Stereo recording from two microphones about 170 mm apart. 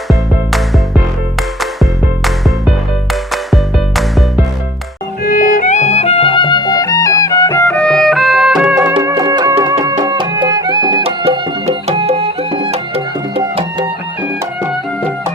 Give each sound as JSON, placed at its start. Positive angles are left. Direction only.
{"t": 0.1, "sound": "music", "side_deg": 0}
{"t": 5.2, "sound": "music", "side_deg": 55}
{"t": 7.7, "sound": "music", "side_deg": 5}
{"t": 9.0, "sound": "music", "side_deg": -20}
{"t": 11.0, "sound": "music", "side_deg": -35}